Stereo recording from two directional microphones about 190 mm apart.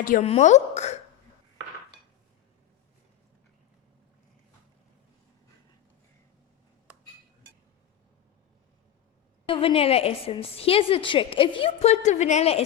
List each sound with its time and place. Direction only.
0.0 s a woman's voice: 45° left (ahead or behind)
9.5 s a woman's voice: 30° left (ahead or behind)